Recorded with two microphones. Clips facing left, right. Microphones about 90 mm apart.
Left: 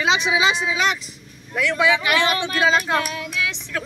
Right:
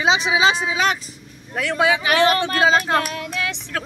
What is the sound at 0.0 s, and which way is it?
Speech, 25° right (ahead or behind).